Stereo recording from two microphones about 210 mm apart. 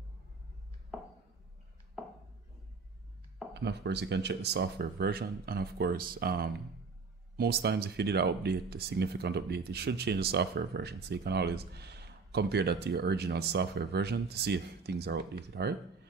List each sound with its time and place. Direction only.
3.5 s speech: 55° right (ahead or behind)